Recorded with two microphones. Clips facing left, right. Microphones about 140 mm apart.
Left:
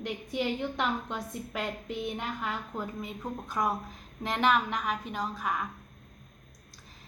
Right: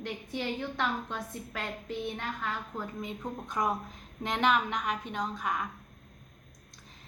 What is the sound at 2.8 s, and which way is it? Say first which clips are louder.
A woman's voice: left 1 dB; 5° left (ahead or behind).